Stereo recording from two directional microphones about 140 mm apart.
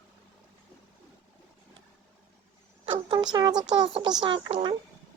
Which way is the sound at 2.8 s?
35° right (ahead or behind).